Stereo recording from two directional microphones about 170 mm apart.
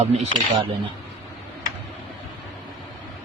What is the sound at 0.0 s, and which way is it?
Speech, 40° right (ahead or behind).